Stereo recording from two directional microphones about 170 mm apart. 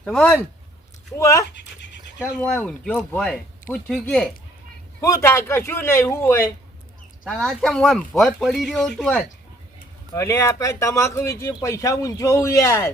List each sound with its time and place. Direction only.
0.0 s speech: 5° left (ahead or behind)
1.1 s speech: 20° left (ahead or behind)
2.4 s speech: 5° left (ahead or behind)
4.9 s speech: 15° left (ahead or behind)
7.3 s speech: 5° left (ahead or behind)
10.2 s speech: 15° left (ahead or behind)